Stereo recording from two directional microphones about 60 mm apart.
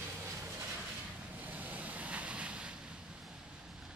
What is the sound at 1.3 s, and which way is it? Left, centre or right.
Waves, right.